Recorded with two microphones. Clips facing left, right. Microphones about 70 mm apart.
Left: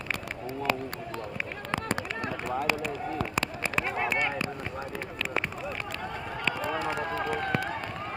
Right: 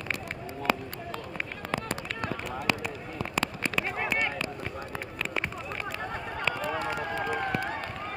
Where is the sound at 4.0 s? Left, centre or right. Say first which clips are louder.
Left 1 dB; centre.